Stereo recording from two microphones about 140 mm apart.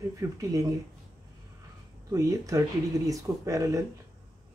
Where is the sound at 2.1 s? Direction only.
25° right (ahead or behind).